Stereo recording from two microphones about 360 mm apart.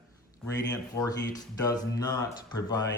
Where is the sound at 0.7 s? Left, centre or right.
Centre.